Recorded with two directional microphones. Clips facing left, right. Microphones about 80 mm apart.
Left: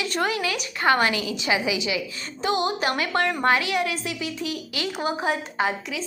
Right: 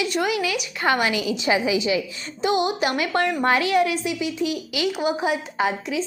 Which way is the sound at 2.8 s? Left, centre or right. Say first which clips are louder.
Right 2 dB; left.